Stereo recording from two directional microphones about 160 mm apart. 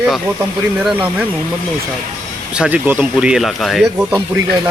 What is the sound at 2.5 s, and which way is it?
Speech, 10° right (ahead or behind).